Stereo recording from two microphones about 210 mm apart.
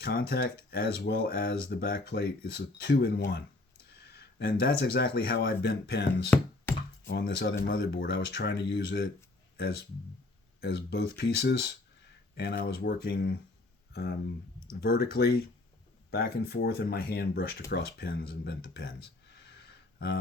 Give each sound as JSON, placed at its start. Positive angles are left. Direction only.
{"t": 0.0, "sound": "speech", "side_deg": 45}